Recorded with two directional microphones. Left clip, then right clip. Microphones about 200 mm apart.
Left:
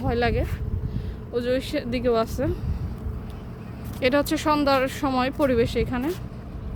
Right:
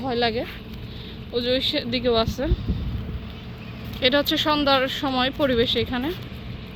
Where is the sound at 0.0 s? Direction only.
15° left (ahead or behind).